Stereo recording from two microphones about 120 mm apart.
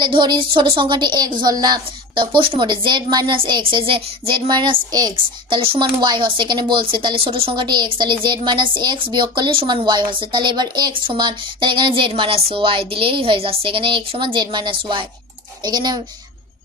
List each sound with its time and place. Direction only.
0.0 s speech: 40° right (ahead or behind)